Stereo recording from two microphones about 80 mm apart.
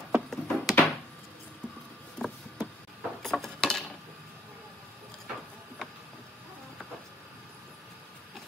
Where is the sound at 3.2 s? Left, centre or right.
Centre.